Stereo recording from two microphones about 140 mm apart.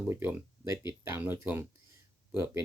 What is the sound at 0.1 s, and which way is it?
Speech, 15° right (ahead or behind).